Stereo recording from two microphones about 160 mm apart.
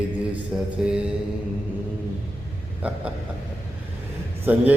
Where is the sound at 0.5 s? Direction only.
10° right (ahead or behind).